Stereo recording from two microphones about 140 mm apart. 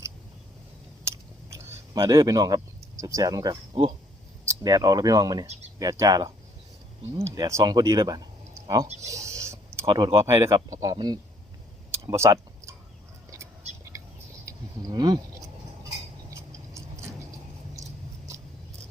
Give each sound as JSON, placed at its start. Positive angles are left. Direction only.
{"t": 1.0, "sound": "a sound", "side_deg": -20}
{"t": 4.4, "sound": "speech", "side_deg": -25}
{"t": 9.0, "sound": "a sound", "side_deg": -20}
{"t": 9.8, "sound": "speech", "side_deg": -35}
{"t": 10.2, "sound": "speech", "side_deg": -20}
{"t": 13.9, "sound": "squawk", "side_deg": -25}
{"t": 14.4, "sound": "speech", "side_deg": -25}
{"t": 16.3, "sound": "clock", "side_deg": -20}